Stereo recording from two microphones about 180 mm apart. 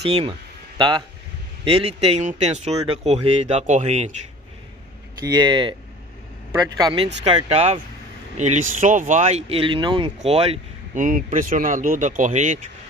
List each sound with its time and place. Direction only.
0.0 s speech: 35° right (ahead or behind)
5.2 s speech: 25° right (ahead or behind)
6.8 s speech: 25° right (ahead or behind)
11.1 s speech: 45° right (ahead or behind)